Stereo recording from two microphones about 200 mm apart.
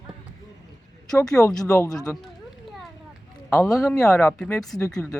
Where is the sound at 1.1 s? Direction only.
5° left (ahead or behind).